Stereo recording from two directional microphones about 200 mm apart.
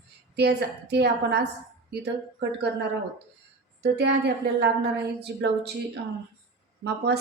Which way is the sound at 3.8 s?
55° right (ahead or behind).